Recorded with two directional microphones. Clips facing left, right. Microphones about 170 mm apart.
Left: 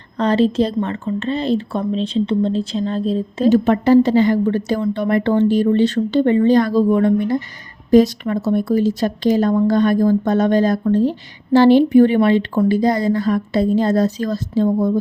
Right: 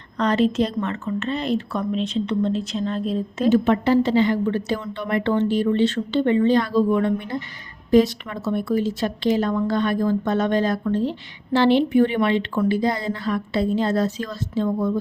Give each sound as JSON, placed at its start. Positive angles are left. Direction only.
{"t": 0.2, "sound": "speech", "side_deg": 30}